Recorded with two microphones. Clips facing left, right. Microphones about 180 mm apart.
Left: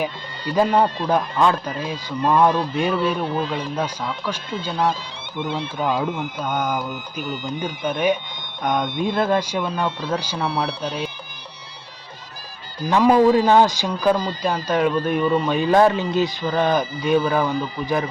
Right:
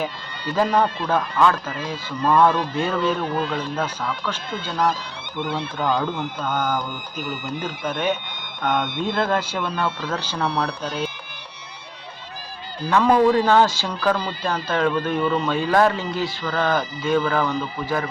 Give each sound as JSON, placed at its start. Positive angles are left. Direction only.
{"t": 0.5, "sound": "speech", "side_deg": 15}
{"t": 5.8, "sound": "speech", "side_deg": 5}
{"t": 12.9, "sound": "speech", "side_deg": 15}